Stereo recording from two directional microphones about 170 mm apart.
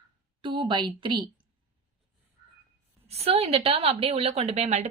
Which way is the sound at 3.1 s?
35° right (ahead or behind).